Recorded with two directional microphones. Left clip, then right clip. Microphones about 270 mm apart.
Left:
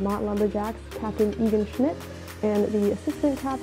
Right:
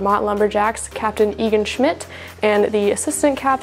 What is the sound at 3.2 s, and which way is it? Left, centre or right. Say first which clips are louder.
Speech: right 10 dB; centre.